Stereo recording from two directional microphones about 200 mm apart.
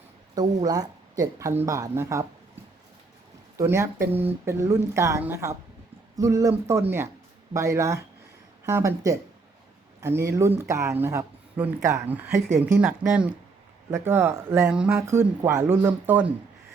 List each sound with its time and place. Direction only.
0.3 s speech: 20° right (ahead or behind)
3.6 s speech: 15° right (ahead or behind)